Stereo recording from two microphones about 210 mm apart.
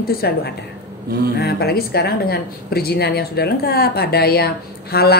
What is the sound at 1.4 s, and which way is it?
Speech, 50° left (ahead or behind).